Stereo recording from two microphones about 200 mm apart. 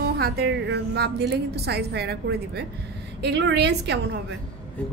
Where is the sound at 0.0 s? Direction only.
50° right (ahead or behind).